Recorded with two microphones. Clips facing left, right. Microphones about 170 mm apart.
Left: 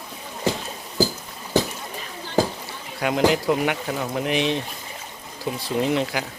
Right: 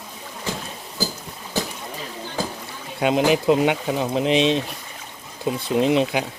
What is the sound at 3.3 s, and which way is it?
Speech, 20° right (ahead or behind).